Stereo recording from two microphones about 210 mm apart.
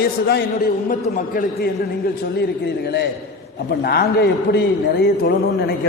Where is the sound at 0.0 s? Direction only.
50° left (ahead or behind).